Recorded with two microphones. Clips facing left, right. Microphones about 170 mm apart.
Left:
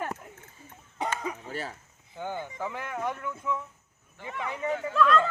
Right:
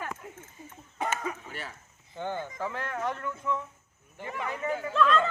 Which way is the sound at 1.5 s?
35° left (ahead or behind).